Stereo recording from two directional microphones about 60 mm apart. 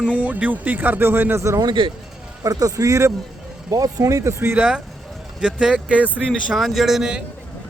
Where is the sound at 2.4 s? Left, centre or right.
Right.